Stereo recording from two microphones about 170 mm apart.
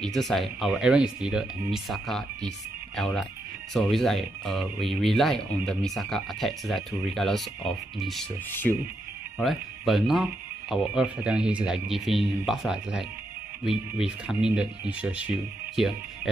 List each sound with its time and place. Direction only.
0.0 s speech: centre (ahead or behind)
8.5 s speech: 10° left (ahead or behind)
9.4 s speech: centre (ahead or behind)